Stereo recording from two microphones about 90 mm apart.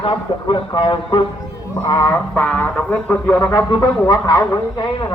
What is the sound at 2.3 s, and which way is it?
Speech, 20° left (ahead or behind).